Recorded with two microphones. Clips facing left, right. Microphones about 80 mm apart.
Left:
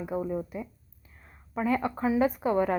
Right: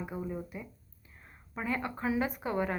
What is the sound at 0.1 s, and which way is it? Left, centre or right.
Speech, left.